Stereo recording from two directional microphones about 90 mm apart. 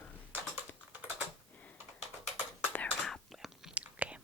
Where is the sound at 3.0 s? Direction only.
Centre (ahead or behind).